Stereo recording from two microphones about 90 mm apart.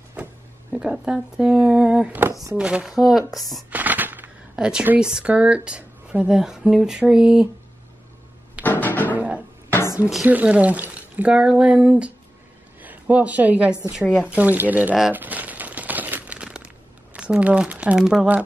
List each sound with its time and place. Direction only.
0.1 s speech: 15° right (ahead or behind); by 3.6 s centre (ahead or behind)
3.7 s a sound: 20° right (ahead or behind)
4.6 s speech: 10° right (ahead or behind)
8.6 s music: 20° left (ahead or behind)
9.1 s music: 15° right (ahead or behind)
10.2 s a woman's voice: 15° right (ahead or behind)
15.1 s crumpling: 20° right (ahead or behind)
17.9 s speech: 5° right (ahead or behind)